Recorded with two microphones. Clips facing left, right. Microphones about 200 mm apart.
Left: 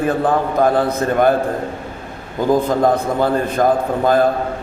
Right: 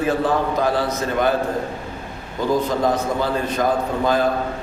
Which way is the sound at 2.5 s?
55° left (ahead or behind).